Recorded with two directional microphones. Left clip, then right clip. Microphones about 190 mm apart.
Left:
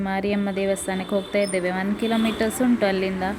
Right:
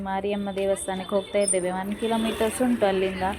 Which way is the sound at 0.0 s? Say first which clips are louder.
Left 3 dB; 20° left (ahead or behind).